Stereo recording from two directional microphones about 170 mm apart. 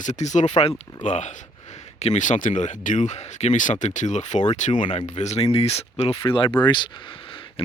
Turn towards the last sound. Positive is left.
turn(degrees=30)  # may be behind; listen again after turning